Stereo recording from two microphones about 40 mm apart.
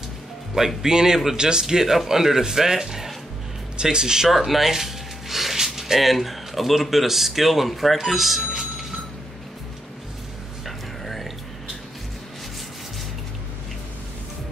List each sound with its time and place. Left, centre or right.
0.8 s a man's voice: centre
4.3 s a sound: centre
5.8 s speech: centre